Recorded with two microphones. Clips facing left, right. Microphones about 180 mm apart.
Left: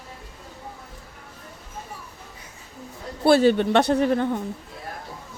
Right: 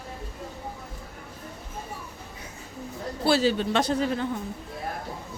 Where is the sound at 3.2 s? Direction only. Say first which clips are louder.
Left 6 dB; 55° left (ahead or behind).